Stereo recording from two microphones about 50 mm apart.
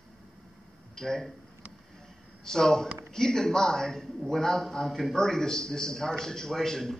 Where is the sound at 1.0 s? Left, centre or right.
Centre.